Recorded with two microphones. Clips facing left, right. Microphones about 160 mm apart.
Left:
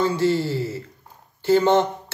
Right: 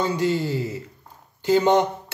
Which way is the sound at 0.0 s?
15° right (ahead or behind).